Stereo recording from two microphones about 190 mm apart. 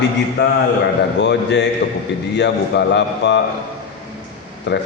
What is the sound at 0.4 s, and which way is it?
A man's voice, 60° left (ahead or behind).